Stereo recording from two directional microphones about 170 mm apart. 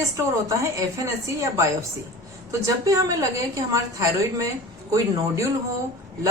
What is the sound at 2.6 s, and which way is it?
A woman's voice, 20° right (ahead or behind).